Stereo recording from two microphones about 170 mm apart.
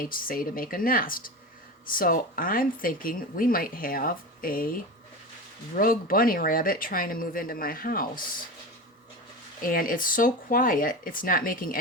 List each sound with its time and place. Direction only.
0.0 s speech: 55° left (ahead or behind)
9.6 s speech: 55° left (ahead or behind)